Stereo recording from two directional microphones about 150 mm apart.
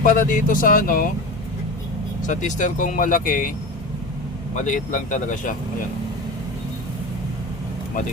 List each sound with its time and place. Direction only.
0.0 s speech: 60° left (ahead or behind)
2.2 s speech: 55° left (ahead or behind); by 3.5 s 70° left (ahead or behind)
4.5 s speech: 60° left (ahead or behind)